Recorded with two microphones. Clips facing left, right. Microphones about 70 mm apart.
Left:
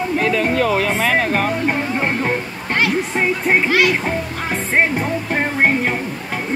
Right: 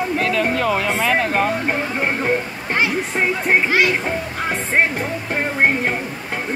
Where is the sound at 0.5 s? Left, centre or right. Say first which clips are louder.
Left 2 dB; right.